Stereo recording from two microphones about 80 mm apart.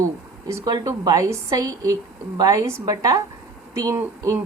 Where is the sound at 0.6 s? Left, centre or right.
Right.